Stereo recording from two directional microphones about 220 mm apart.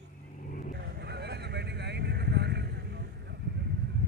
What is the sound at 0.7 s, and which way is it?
Vehicle, 50° right (ahead or behind).